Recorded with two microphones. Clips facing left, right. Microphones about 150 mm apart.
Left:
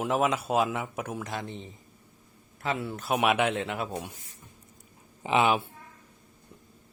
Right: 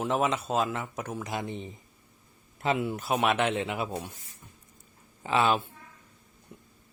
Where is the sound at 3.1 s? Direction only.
10° left (ahead or behind).